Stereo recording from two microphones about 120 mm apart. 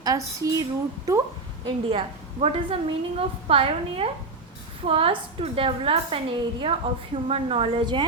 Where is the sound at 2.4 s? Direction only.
55° right (ahead or behind).